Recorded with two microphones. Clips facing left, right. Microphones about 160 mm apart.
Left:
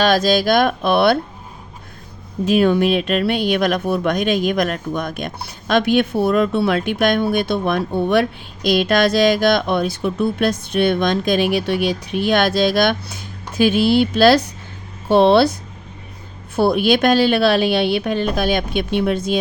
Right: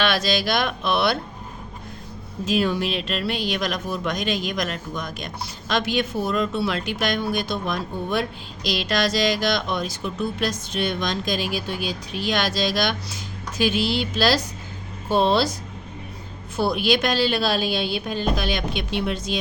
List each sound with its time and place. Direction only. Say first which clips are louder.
0.0 s speech: left 7 dB; 45° left (ahead or behind)
2.4 s speech: left 8 dB; 60° left (ahead or behind)
16.6 s speech: left 6 dB; 55° left (ahead or behind)